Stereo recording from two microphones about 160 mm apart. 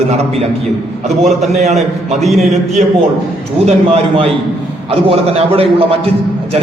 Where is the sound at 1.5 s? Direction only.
45° right (ahead or behind).